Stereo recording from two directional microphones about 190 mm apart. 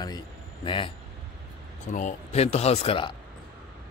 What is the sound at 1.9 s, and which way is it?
Speech, 35° left (ahead or behind).